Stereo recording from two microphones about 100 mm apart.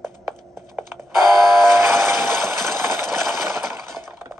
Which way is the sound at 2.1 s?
5° left (ahead or behind).